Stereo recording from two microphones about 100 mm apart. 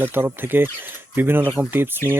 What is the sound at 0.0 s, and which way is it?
Speech, 20° right (ahead or behind).